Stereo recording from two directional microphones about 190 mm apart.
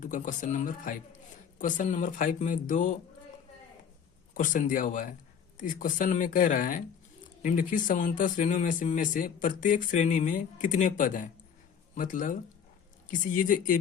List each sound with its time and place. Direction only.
0.0 s speech: 40° left (ahead or behind)
4.4 s speech: 45° left (ahead or behind)